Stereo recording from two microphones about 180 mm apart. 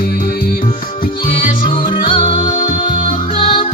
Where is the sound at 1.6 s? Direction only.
30° left (ahead or behind).